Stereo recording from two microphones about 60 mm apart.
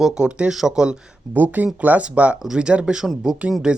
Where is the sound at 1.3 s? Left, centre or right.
Right.